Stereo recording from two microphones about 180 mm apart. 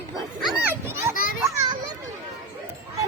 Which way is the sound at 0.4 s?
10° right (ahead or behind).